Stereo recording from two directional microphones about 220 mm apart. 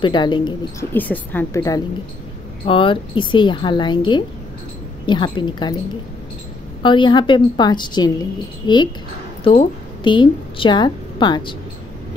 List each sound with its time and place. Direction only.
0.0 s a woman's voice: 20° left (ahead or behind)
0.9 s a woman's voice: 10° left (ahead or behind)
6.8 s a woman's voice: 20° left (ahead or behind)
10.0 s a woman's voice: 20° left (ahead or behind)